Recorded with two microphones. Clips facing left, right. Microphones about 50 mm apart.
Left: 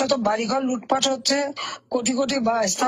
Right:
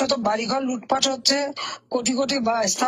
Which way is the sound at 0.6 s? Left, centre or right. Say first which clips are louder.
Left 1 dB; left.